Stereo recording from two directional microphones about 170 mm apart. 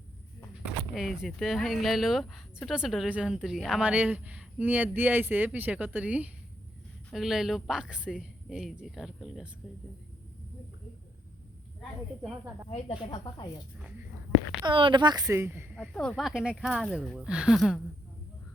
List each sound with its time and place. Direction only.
0.6 s a woman's voice: centre (ahead or behind)
12.6 s speech: 35° left (ahead or behind)
14.6 s a woman's voice: 30° right (ahead or behind); by 15.6 s 15° right (ahead or behind)
15.8 s a woman's voice: 5° left (ahead or behind)